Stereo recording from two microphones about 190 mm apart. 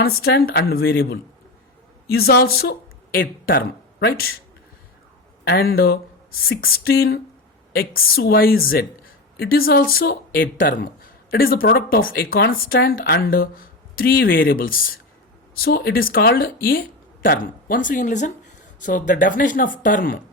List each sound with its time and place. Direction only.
0.0 s speech: 55° left (ahead or behind)
5.5 s speech: 55° left (ahead or behind)